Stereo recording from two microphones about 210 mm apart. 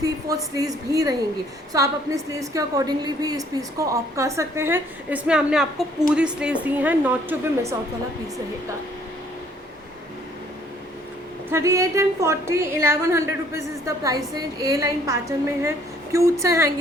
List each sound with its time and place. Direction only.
0.0 s a woman's voice: 15° right (ahead or behind)
11.5 s a woman's voice: 15° right (ahead or behind)